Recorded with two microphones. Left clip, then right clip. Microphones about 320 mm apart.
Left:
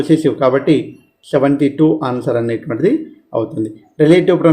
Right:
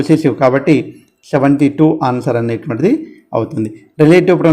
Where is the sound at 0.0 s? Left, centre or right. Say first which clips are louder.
Right 1 dB; right.